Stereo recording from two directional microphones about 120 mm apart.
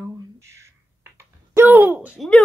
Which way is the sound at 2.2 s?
10° left (ahead or behind).